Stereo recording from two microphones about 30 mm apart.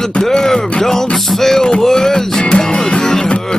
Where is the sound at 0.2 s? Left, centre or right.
Centre.